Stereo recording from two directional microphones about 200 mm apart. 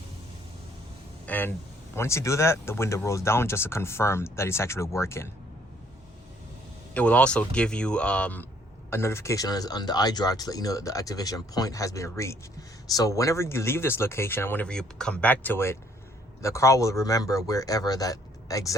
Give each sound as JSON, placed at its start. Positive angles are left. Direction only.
{"t": 1.3, "sound": "speech", "side_deg": 10}
{"t": 6.9, "sound": "speech", "side_deg": 5}